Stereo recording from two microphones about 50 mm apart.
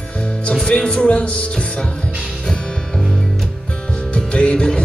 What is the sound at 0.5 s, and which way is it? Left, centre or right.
Speech, centre.